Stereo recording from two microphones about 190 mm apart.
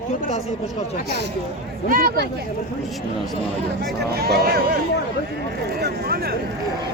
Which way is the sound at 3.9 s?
55° right (ahead or behind).